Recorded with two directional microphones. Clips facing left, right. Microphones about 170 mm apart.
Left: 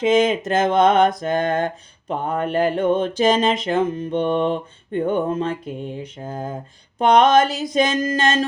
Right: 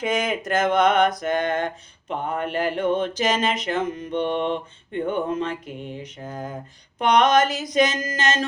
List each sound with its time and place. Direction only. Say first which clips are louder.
0.0 s mantra: left 7 dB; 25° left (ahead or behind)